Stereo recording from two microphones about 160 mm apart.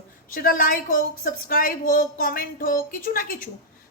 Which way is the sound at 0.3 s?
60° left (ahead or behind).